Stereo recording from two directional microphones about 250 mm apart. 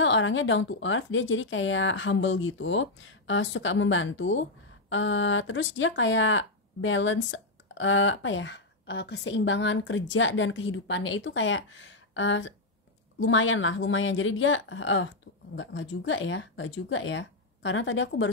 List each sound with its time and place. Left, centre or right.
0.0 s speech: left